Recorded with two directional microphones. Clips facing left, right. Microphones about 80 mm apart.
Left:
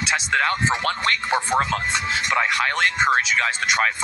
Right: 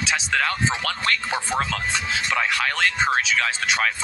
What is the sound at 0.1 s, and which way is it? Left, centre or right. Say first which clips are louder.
Speech: left 3 dB; left.